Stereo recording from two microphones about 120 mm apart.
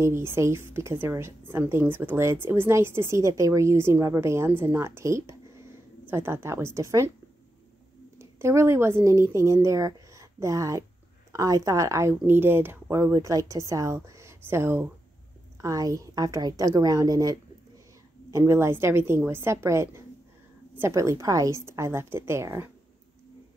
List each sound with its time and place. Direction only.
0.0 s a woman's voice: 20° right (ahead or behind)
8.2 s a woman's voice: 20° right (ahead or behind)